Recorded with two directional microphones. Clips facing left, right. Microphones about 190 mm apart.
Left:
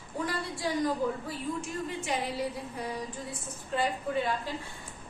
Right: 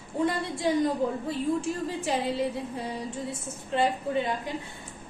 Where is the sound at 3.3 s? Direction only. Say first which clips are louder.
Right 3 dB; 25° right (ahead or behind).